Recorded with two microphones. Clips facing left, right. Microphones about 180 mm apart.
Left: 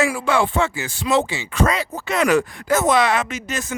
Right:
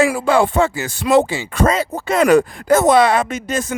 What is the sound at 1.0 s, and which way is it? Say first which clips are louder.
Speech: right 6 dB; 55° right (ahead or behind).